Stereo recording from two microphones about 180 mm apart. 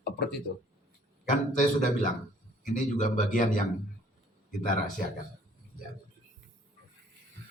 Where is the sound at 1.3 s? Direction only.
45° left (ahead or behind).